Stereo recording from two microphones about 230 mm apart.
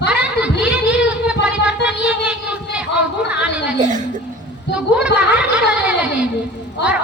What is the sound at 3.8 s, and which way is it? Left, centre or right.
Speech, right.